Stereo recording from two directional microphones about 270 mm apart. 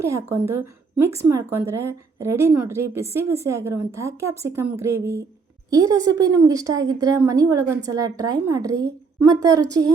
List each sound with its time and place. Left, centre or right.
0.0 s a woman's voice: centre